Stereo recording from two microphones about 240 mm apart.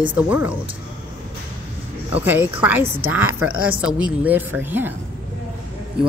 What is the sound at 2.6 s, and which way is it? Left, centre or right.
A man's voice, centre.